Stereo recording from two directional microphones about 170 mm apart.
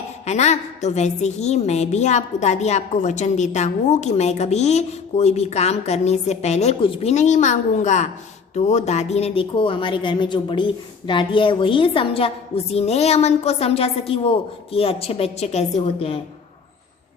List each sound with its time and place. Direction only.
0.3 s a woman's voice: 40° left (ahead or behind)